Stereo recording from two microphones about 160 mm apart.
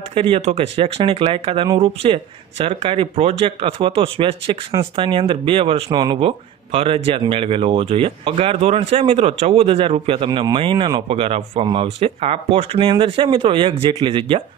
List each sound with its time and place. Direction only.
0.1 s speech: 35° right (ahead or behind)